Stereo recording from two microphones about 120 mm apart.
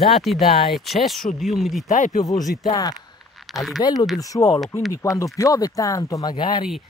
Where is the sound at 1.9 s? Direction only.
90° left.